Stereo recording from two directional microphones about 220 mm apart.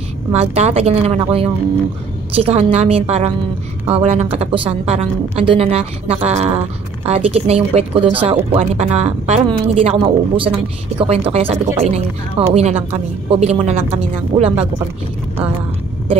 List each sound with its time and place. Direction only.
0.3 s speech: 30° right (ahead or behind)